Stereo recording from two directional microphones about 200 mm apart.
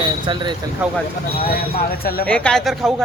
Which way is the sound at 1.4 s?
50° left (ahead or behind).